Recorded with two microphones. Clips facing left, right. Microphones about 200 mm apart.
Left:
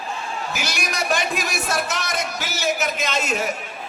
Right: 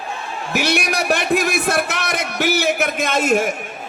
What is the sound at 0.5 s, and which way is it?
Speech, 60° right (ahead or behind).